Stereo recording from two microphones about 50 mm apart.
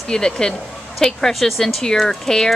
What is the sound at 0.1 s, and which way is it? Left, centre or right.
A woman's voice, centre.